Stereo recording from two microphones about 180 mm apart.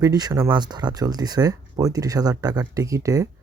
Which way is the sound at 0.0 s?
20° right (ahead or behind).